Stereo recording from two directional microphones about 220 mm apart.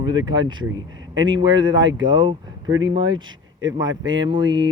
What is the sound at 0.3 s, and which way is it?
Speech, 20° right (ahead or behind).